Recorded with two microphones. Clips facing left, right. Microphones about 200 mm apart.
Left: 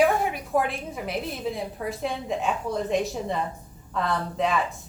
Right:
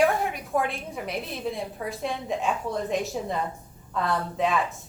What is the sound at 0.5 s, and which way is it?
A woman's voice, centre (ahead or behind).